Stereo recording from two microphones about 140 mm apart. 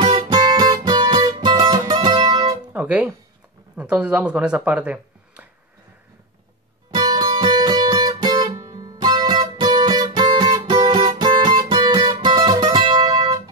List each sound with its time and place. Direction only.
0.0 s music: 35° right (ahead or behind)
2.7 s music: 10° right (ahead or behind)
3.7 s speech: 10° right (ahead or behind)
6.9 s music: 30° right (ahead or behind)